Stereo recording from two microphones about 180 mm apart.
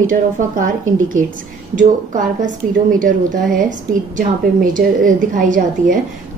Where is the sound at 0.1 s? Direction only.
45° right (ahead or behind).